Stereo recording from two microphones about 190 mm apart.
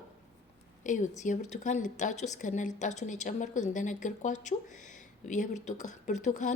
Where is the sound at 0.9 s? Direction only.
40° left (ahead or behind).